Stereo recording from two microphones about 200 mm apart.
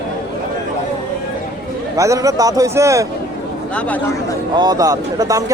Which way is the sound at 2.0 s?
15° right (ahead or behind).